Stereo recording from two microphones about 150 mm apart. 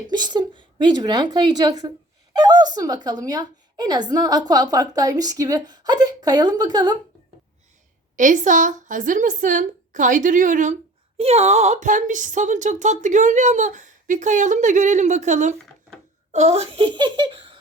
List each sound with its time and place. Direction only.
0.1 s a woman's voice: 30° right (ahead or behind)
8.1 s speech: 60° right (ahead or behind)
11.2 s a woman's voice: 45° right (ahead or behind)